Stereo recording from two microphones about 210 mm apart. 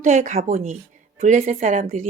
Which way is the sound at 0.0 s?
35° right (ahead or behind).